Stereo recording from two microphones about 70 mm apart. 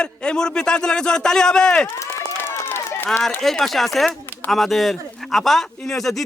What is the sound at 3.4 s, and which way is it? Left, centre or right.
Speech, centre.